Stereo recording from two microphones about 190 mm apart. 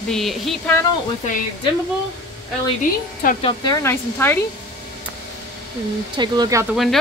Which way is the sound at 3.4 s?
20° left (ahead or behind).